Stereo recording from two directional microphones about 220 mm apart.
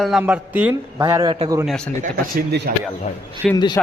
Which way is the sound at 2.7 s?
40° right (ahead or behind).